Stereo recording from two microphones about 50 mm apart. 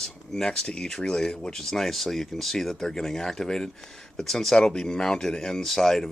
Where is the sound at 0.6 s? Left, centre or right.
Left; by 6.1 s centre.